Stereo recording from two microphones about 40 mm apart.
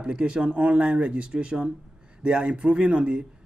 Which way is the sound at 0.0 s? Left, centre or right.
Right.